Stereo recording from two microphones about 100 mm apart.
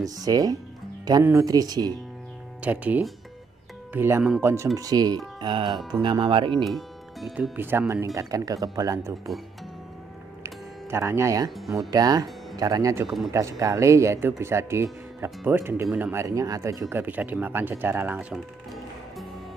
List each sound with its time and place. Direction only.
0.0 s speech: 40° right (ahead or behind)
2.6 s speech: 15° right (ahead or behind)
4.7 s speech: 40° right (ahead or behind); by 6.6 s 55° right (ahead or behind)
6.6 s speech: centre (ahead or behind)
7.5 s speech: 20° right (ahead or behind)
10.4 s music: 30° right (ahead or behind)
11.9 s speech: 40° right (ahead or behind)
16.9 s speech: 15° right (ahead or behind)